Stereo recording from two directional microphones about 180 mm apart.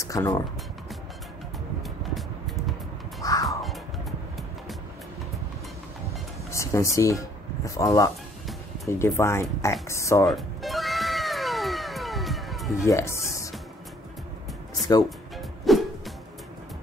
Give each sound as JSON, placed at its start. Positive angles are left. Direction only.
{"t": 0.0, "sound": "speech", "side_deg": 20}
{"t": 1.8, "sound": "vehicle", "side_deg": 0}
{"t": 3.2, "sound": "music", "side_deg": 20}
{"t": 6.5, "sound": "speech", "side_deg": 15}
{"t": 10.2, "sound": "cat", "side_deg": 0}
{"t": 12.8, "sound": "speech", "side_deg": 15}
{"t": 15.7, "sound": "music", "side_deg": 0}